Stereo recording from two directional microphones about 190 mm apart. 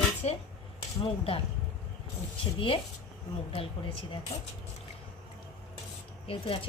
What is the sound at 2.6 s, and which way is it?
Speech, 25° left (ahead or behind).